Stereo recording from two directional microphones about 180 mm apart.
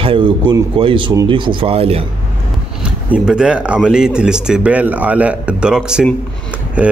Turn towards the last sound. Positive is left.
turn(degrees=-10)  # may be behind; listen again after turning